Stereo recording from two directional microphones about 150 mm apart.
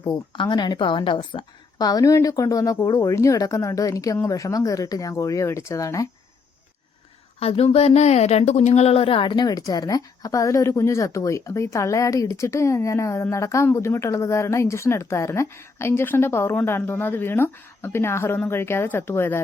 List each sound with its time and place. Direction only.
0.0 s a woman's voice: 30° left (ahead or behind)
7.3 s a woman's voice: 40° left (ahead or behind); by 19.4 s 15° left (ahead or behind)